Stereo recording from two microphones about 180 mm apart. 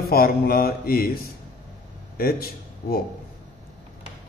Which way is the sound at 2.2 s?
55° left (ahead or behind).